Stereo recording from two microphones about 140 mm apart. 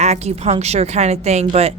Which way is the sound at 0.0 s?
50° right (ahead or behind).